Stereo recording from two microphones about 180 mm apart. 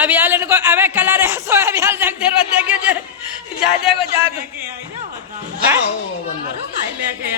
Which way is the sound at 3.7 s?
30° left (ahead or behind).